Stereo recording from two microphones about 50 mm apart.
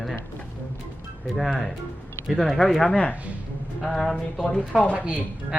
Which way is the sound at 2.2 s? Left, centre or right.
Centre.